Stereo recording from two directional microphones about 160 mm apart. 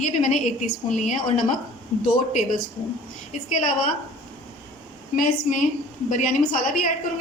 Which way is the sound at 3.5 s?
55° left (ahead or behind).